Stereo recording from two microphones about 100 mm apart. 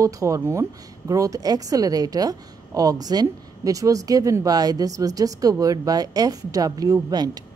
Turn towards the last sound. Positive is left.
turn(degrees=-45)  # may be behind; listen again after turning